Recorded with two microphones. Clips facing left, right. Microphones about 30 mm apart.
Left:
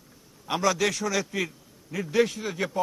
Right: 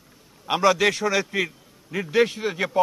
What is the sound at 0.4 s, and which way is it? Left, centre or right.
A man's voice, right.